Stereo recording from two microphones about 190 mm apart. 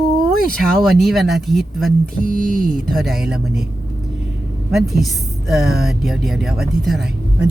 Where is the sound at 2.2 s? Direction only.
50° right (ahead or behind).